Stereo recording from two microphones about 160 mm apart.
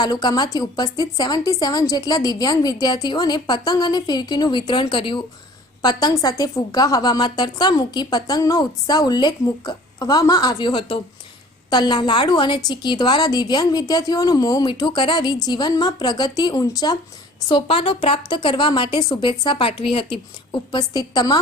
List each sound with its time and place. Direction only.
0.0 s a woman's voice: 25° left (ahead or behind)